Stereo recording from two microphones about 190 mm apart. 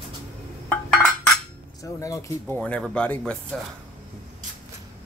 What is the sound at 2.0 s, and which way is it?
Speech, 15° left (ahead or behind).